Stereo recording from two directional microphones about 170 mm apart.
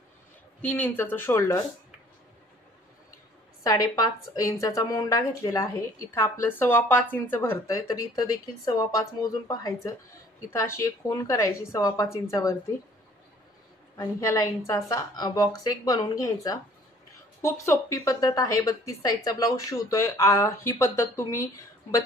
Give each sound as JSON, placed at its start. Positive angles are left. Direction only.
{"t": 0.6, "sound": "a woman's voice", "side_deg": 10}
{"t": 3.6, "sound": "a woman's voice", "side_deg": 20}
{"t": 13.9, "sound": "speech", "side_deg": 20}
{"t": 17.4, "sound": "a woman's voice", "side_deg": 15}